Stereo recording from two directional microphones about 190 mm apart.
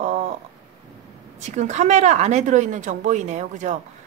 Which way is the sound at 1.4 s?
35° right (ahead or behind).